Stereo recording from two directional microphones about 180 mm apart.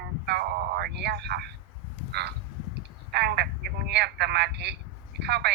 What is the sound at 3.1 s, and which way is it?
Telephone, 65° right (ahead or behind).